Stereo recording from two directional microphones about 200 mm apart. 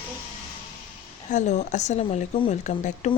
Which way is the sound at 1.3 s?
35° left (ahead or behind).